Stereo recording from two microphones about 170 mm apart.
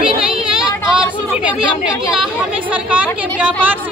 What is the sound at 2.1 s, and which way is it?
A woman's voice, 5° right (ahead or behind).